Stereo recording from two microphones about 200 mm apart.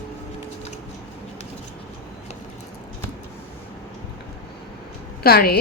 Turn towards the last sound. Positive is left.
turn(degrees=50)  # may be behind; listen again after turning